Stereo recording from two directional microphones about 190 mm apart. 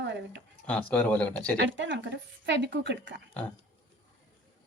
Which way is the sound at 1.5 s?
75° right (ahead or behind).